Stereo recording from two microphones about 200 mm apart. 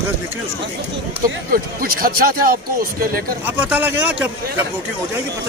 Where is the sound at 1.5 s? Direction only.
45° right (ahead or behind).